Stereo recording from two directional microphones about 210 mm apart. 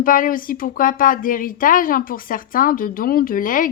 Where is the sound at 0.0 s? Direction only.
40° left (ahead or behind).